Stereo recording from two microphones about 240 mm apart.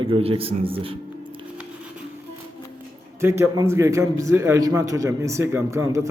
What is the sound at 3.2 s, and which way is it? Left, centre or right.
A man's voice, centre.